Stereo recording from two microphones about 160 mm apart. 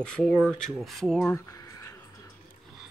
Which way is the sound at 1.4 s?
20° left (ahead or behind).